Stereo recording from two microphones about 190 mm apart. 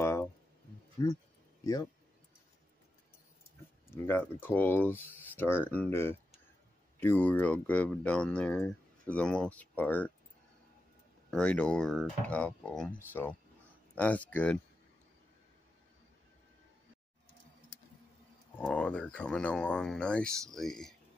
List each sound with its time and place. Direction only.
0.0 s a sound: 15° left (ahead or behind)
1.0 s speech: 15° left (ahead or behind)
3.9 s speech: 10° left (ahead or behind)
11.2 s speech: 5° left (ahead or behind)
18.6 s speech: 5° left (ahead or behind)